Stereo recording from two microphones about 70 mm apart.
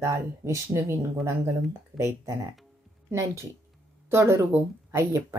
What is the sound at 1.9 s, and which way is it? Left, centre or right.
A woman's voice, right.